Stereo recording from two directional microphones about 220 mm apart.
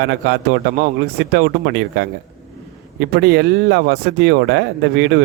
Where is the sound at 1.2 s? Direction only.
50° right (ahead or behind).